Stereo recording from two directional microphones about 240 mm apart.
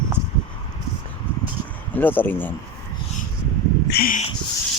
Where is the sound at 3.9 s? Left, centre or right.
Left.